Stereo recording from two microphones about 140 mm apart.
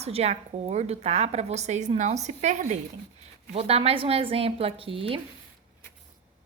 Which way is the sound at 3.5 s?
45° right (ahead or behind).